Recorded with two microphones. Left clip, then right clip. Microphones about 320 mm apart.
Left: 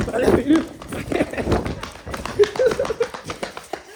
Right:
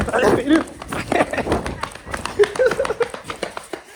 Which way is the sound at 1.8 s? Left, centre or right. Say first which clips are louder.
Right 3 dB; centre.